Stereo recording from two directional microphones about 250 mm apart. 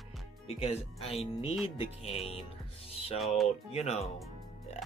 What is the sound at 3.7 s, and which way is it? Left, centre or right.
Speech, left.